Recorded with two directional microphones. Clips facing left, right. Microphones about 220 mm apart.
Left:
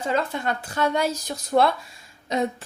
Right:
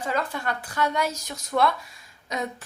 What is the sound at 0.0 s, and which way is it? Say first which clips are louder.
A woman's voice: left 3 dB; 25° left (ahead or behind).